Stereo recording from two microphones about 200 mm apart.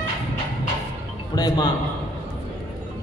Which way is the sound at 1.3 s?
20° left (ahead or behind).